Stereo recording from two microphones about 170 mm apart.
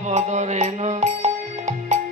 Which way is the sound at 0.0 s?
45° right (ahead or behind).